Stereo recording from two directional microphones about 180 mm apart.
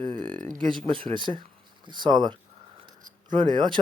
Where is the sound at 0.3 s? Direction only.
45° right (ahead or behind).